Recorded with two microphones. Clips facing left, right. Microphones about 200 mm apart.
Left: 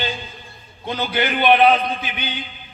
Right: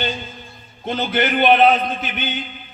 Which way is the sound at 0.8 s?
50° right (ahead or behind).